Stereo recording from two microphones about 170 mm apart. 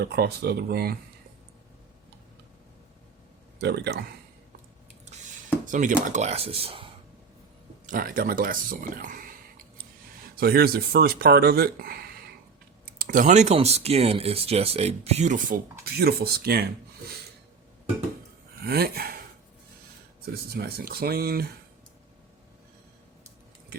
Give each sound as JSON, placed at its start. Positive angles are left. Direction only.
{"t": 0.0, "sound": "speech", "side_deg": -75}
{"t": 3.6, "sound": "speech", "side_deg": -80}
{"t": 5.6, "sound": "speech", "side_deg": -50}
{"t": 7.9, "sound": "speech", "side_deg": -55}
{"t": 10.3, "sound": "speech", "side_deg": -60}
{"t": 15.8, "sound": "speech", "side_deg": -65}
{"t": 18.6, "sound": "speech", "side_deg": -65}
{"t": 20.3, "sound": "speech", "side_deg": -65}